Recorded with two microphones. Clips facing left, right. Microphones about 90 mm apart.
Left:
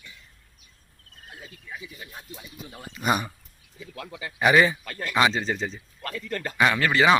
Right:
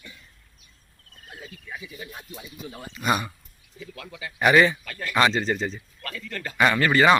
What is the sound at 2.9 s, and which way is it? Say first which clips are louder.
Speech: even; 15° left (ahead or behind).